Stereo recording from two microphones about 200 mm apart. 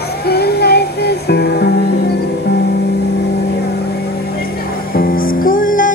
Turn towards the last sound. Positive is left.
turn(degrees=45)  # may be behind; listen again after turning